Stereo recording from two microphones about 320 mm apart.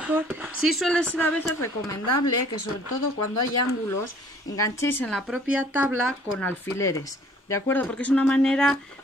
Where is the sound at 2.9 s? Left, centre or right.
Left.